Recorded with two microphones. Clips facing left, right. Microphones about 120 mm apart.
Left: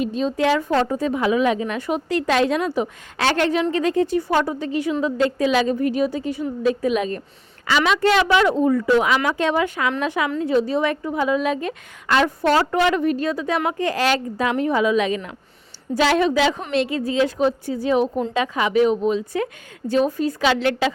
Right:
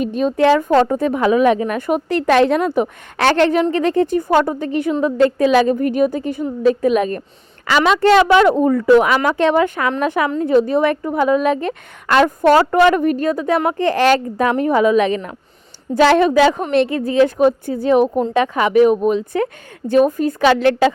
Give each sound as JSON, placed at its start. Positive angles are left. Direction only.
{"t": 0.0, "sound": "a woman's voice", "side_deg": -55}